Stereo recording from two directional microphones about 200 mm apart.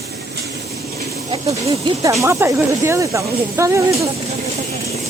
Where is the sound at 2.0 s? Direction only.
15° right (ahead or behind).